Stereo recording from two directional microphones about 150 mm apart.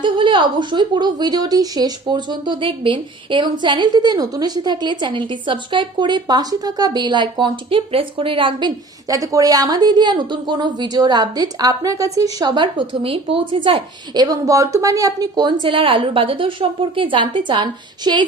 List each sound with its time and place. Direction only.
0.0 s a woman's voice: 35° right (ahead or behind)